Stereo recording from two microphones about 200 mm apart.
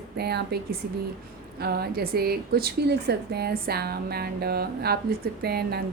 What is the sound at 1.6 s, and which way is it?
Speech, 50° right (ahead or behind).